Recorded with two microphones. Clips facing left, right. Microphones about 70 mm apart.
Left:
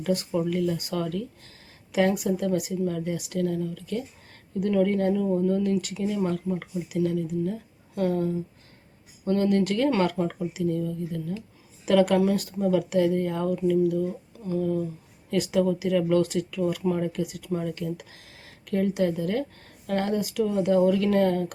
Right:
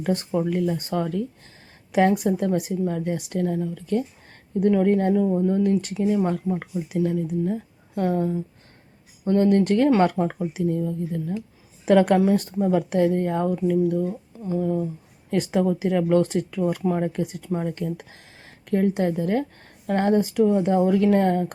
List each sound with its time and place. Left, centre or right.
0.0 s a woman's voice: right
14.3 s speech: right